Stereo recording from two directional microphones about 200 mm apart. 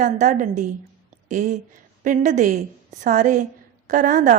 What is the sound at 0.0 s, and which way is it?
A woman's voice, 40° right (ahead or behind).